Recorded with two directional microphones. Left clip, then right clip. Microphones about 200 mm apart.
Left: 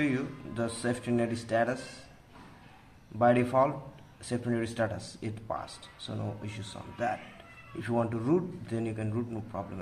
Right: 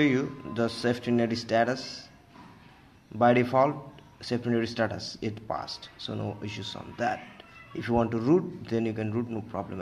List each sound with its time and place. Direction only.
0.0 s speech: 25° right (ahead or behind)
3.2 s speech: 25° right (ahead or behind)